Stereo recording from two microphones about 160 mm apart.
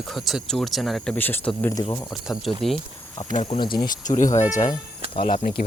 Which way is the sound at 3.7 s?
55° left (ahead or behind).